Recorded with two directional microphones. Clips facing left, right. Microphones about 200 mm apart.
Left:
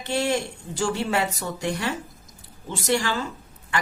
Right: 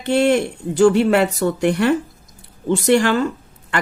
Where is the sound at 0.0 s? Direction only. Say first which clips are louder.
Right 9 dB; 60° right (ahead or behind).